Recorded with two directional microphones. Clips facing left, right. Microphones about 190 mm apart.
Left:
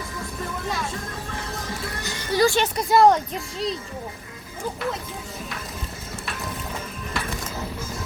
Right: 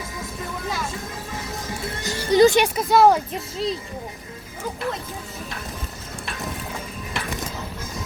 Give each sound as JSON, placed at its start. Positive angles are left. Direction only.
{"t": 2.3, "sound": "music", "side_deg": -20}
{"t": 2.7, "sound": "speech", "side_deg": -5}